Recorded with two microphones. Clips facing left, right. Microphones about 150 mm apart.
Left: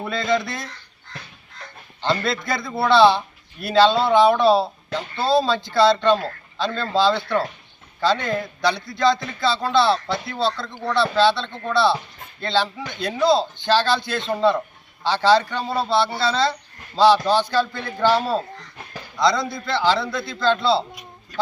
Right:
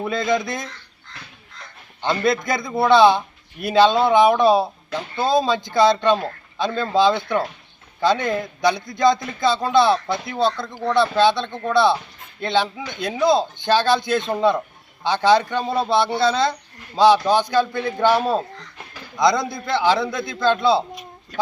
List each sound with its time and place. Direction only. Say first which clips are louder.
0.0 s a man's voice: right 1 dB; 15° right (ahead or behind)
2.0 s a man's voice: right 3 dB; 15° right (ahead or behind)